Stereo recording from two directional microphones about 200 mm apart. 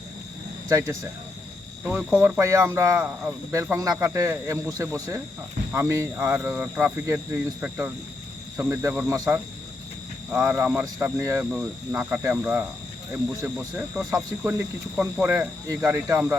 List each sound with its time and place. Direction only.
0.7 s speech: 15° right (ahead or behind)
8.5 s speech: 10° right (ahead or behind)